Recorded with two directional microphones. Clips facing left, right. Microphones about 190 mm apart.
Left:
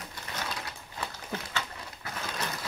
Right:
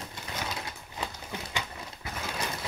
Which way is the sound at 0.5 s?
20° right (ahead or behind).